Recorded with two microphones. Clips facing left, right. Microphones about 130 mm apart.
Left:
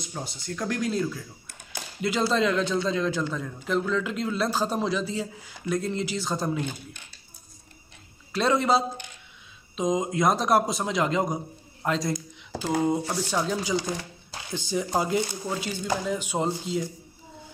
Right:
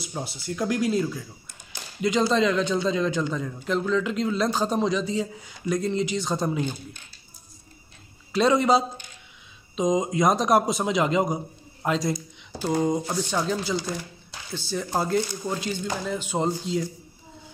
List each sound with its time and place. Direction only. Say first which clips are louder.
0.0 s a man's voice: right 3 dB; 5° right (ahead or behind)
8.3 s a man's voice: right 3 dB; centre (ahead or behind)
13.1 s speech: right 1 dB; 5° left (ahead or behind)